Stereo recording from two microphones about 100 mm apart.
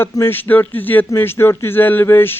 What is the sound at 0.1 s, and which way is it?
A man's voice, 25° left (ahead or behind).